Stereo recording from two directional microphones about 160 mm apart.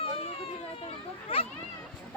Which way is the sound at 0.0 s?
35° left (ahead or behind).